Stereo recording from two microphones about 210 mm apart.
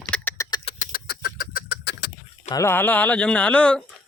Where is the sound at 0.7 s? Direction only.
35° left (ahead or behind).